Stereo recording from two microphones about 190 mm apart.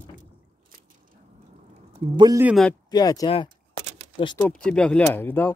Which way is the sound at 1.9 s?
20° right (ahead or behind).